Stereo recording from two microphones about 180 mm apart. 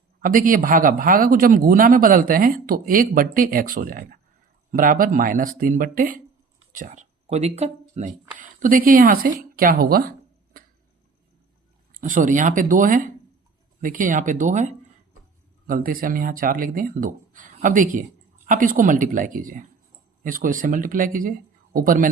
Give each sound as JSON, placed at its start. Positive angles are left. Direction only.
{"t": 0.2, "sound": "speech", "side_deg": -50}
{"t": 8.4, "sound": "a woman's voice", "side_deg": -50}
{"t": 11.9, "sound": "speech", "side_deg": -50}